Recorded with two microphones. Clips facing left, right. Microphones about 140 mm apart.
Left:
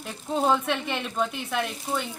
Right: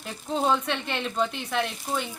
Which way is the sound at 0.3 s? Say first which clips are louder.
Left 1 dB; 5° left (ahead or behind).